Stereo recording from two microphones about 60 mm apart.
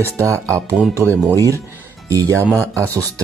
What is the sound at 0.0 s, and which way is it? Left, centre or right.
Speech, right.